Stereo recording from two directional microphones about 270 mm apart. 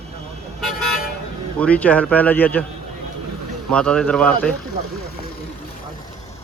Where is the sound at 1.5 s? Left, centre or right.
Centre.